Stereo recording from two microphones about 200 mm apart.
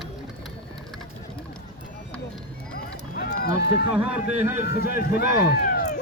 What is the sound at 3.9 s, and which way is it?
Speech, 10° right (ahead or behind).